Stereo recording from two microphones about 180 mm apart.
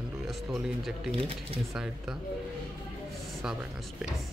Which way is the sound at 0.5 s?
Centre (ahead or behind).